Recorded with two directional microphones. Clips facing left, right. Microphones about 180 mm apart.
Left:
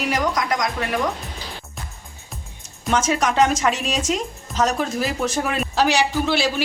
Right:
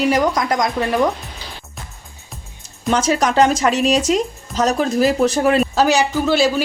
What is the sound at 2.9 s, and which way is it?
Speech, 35° right (ahead or behind).